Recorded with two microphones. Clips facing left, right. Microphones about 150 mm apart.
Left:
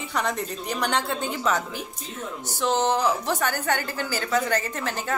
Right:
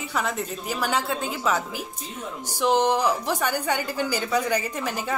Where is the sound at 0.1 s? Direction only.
5° right (ahead or behind).